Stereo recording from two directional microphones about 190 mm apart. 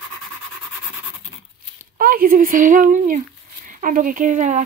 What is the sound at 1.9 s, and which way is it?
Speech, 50° right (ahead or behind).